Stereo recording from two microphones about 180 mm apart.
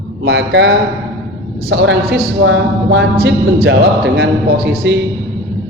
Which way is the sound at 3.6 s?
65° right (ahead or behind).